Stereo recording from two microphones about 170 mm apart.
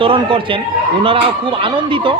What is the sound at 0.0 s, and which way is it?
Speech, 30° right (ahead or behind).